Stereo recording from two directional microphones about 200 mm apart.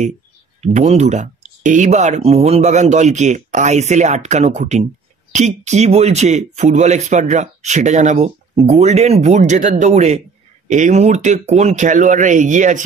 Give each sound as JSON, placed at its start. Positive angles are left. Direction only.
{"t": 0.6, "sound": "speech", "side_deg": -35}